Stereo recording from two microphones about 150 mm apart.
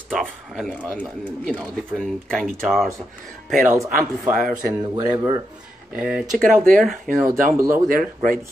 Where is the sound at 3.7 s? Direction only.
15° right (ahead or behind).